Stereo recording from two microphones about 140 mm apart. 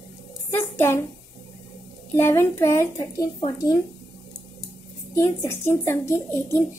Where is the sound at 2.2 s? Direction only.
20° left (ahead or behind).